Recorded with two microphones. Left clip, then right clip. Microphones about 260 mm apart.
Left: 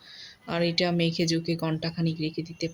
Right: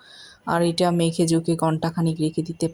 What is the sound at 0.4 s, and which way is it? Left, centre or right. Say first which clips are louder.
Speech: right 6 dB; centre.